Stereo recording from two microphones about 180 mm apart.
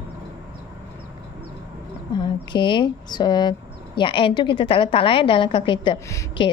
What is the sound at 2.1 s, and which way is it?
A woman's voice, 25° left (ahead or behind).